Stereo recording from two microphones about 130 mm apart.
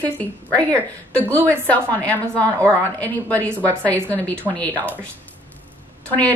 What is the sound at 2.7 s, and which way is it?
Speech, 10° left (ahead or behind).